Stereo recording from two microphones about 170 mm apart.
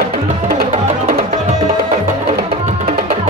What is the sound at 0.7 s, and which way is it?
Music, 50° right (ahead or behind).